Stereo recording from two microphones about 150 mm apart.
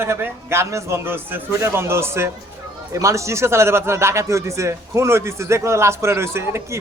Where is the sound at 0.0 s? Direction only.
15° right (ahead or behind).